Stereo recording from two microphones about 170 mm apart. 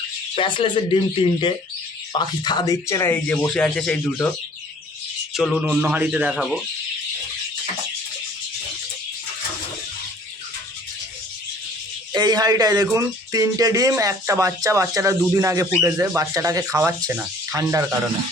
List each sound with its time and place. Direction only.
0.3 s speech: 30° left (ahead or behind); by 4.3 s 5° left (ahead or behind)
5.3 s a man's voice: centre (ahead or behind)
12.1 s speech: 25° right (ahead or behind)